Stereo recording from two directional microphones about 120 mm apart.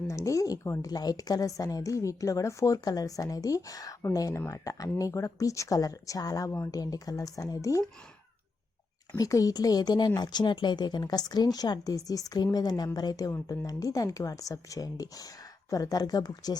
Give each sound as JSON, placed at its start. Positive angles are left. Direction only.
{"t": 0.1, "sound": "a woman's voice", "side_deg": 25}
{"t": 9.1, "sound": "a woman's voice", "side_deg": 30}